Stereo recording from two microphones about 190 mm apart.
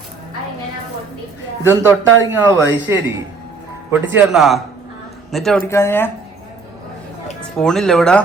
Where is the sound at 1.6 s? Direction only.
10° right (ahead or behind).